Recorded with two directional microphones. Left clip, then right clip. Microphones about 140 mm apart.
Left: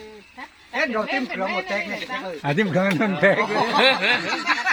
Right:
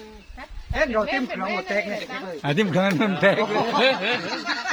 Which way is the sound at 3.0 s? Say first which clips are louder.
Left 2 dB; 30° right (ahead or behind).